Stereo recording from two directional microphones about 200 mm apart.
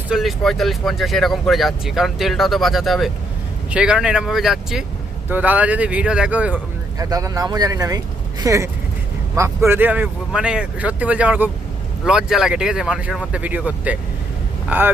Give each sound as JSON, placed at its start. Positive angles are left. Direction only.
{"t": 0.1, "sound": "speech", "side_deg": 0}
{"t": 7.0, "sound": "speech", "side_deg": -15}